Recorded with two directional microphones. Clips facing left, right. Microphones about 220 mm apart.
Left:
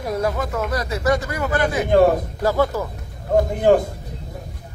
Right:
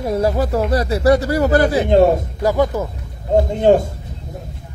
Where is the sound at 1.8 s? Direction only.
25° right (ahead or behind).